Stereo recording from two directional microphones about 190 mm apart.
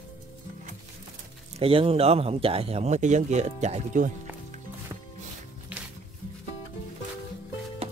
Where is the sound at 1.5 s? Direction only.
30° right (ahead or behind).